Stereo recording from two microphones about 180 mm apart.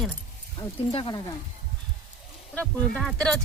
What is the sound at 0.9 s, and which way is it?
Speech, 25° left (ahead or behind).